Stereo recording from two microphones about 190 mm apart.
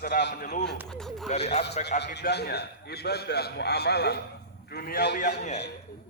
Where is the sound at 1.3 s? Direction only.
35° left (ahead or behind).